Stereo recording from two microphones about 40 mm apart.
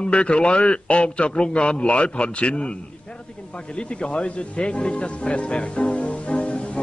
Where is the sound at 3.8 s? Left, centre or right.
Left.